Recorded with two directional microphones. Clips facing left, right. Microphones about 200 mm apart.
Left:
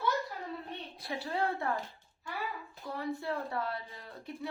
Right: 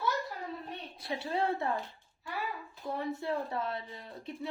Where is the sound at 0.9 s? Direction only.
25° right (ahead or behind).